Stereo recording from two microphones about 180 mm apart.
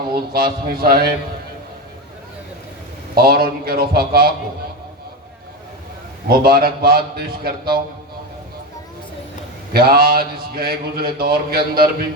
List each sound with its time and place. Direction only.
0.1 s speech: 55° right (ahead or behind)
3.2 s speech: 55° right (ahead or behind)
6.2 s speech: 55° right (ahead or behind)
9.7 s speech: 55° right (ahead or behind)